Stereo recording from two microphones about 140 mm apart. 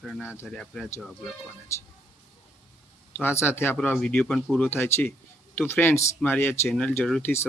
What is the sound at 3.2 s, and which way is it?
Speech, 15° left (ahead or behind).